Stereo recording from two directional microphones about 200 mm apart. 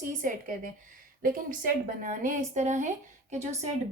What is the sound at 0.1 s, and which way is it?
A woman's voice, 40° right (ahead or behind).